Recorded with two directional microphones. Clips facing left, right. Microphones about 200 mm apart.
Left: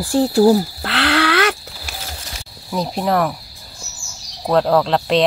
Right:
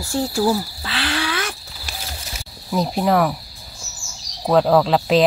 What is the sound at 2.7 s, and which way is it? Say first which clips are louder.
Speech: right 1 dB; centre (ahead or behind).